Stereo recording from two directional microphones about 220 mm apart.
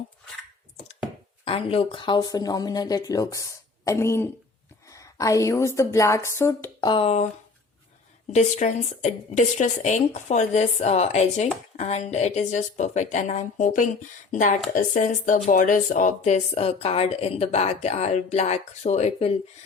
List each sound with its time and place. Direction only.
1.5 s a woman's voice: 25° left (ahead or behind)
8.3 s a woman's voice: 30° left (ahead or behind)